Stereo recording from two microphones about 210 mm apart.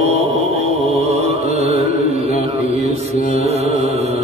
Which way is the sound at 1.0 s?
30° right (ahead or behind).